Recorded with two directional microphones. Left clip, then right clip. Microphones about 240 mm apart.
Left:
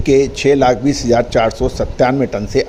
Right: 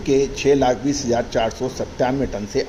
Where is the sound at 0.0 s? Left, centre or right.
Left.